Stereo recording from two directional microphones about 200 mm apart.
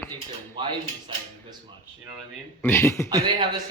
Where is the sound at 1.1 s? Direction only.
25° right (ahead or behind).